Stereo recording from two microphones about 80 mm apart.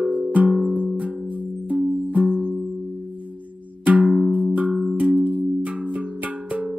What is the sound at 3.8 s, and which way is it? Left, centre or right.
Music, centre.